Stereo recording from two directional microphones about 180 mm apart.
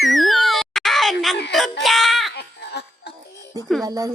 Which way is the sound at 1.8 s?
Centre (ahead or behind).